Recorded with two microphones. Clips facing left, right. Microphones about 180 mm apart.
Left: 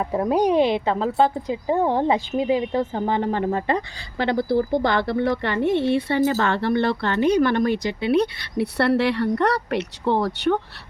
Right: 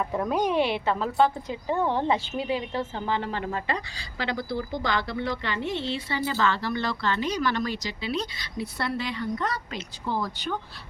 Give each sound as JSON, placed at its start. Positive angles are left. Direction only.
{"t": 0.4, "sound": "a woman's voice", "side_deg": 15}
{"t": 1.7, "sound": "speech", "side_deg": 40}
{"t": 2.4, "sound": "a woman's voice", "side_deg": 20}
{"t": 3.7, "sound": "speech", "side_deg": 55}